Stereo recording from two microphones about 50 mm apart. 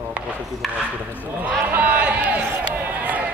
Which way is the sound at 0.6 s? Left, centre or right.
Centre.